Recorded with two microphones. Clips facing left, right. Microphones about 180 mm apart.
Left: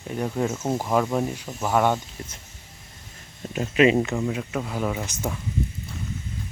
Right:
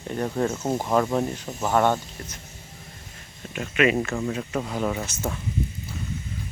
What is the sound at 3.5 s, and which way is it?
Speech, 35° left (ahead or behind).